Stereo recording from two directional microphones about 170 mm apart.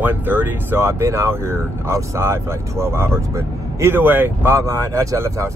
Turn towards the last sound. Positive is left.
turn(degrees=-15)  # may be behind; listen again after turning